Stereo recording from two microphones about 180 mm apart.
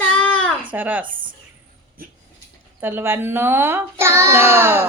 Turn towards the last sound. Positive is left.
turn(degrees=-15)  # may be behind; listen again after turning